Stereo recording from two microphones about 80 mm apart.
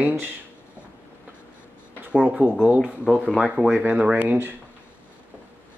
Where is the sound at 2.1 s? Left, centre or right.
Centre.